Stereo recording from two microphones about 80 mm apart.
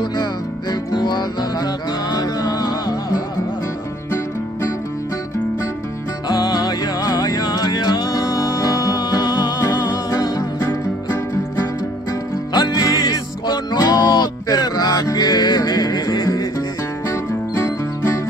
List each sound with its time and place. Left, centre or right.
0.0 s music: left
4.1 s music: left
6.2 s music: left
17.1 s music: left